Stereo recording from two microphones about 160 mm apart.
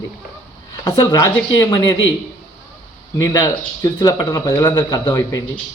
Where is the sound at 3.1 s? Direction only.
20° left (ahead or behind).